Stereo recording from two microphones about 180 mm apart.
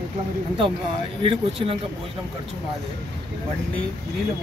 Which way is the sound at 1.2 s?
30° right (ahead or behind).